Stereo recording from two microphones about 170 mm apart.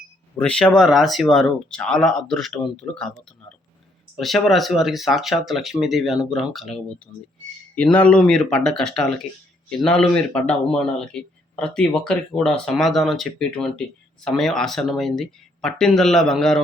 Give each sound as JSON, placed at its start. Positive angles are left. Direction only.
{"t": 0.3, "sound": "a man's voice", "side_deg": 5}
{"t": 4.2, "sound": "a man's voice", "side_deg": 0}
{"t": 7.9, "sound": "a man's voice", "side_deg": 5}